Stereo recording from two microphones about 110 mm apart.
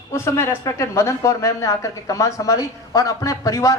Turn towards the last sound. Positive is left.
turn(degrees=30)  # may be behind; listen again after turning